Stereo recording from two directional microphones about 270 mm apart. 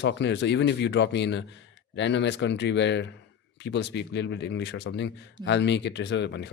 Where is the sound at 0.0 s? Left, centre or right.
Left.